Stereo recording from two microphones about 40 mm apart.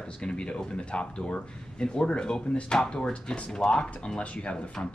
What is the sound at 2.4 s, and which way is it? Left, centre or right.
Speech, left.